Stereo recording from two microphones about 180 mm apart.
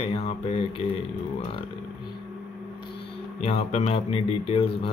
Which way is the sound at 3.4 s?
35° left (ahead or behind).